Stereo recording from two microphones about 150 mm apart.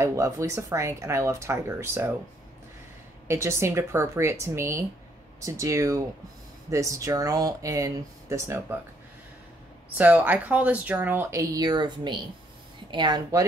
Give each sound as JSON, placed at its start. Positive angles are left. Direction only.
{"t": 0.0, "sound": "speech", "side_deg": -20}
{"t": 3.3, "sound": "speech", "side_deg": -20}
{"t": 9.9, "sound": "speech", "side_deg": -10}